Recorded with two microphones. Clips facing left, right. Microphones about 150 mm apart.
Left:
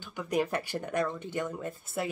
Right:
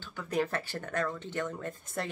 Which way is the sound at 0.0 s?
15° left (ahead or behind).